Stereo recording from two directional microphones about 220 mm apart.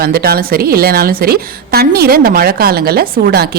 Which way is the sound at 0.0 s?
45° right (ahead or behind).